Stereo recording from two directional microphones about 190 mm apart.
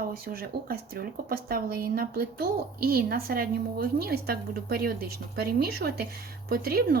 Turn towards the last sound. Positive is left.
turn(degrees=-55)  # may be behind; listen again after turning